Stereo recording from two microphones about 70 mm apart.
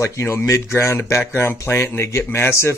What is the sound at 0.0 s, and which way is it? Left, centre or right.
Speech, left.